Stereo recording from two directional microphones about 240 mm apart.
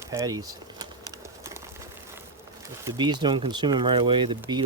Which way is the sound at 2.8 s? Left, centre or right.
Centre.